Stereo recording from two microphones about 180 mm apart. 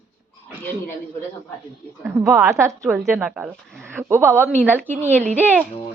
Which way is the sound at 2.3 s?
15° right (ahead or behind).